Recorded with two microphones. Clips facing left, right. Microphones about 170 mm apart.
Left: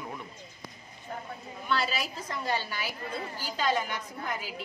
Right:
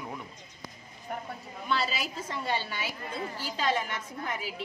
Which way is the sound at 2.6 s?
25° right (ahead or behind).